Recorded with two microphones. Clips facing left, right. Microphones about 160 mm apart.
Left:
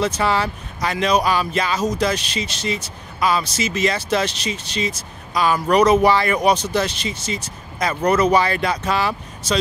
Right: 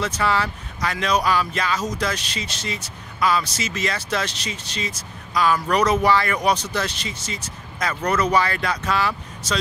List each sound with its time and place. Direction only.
0.0 s speech: 25° left (ahead or behind)